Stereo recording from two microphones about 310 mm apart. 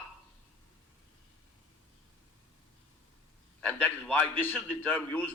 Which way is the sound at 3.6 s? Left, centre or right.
Centre.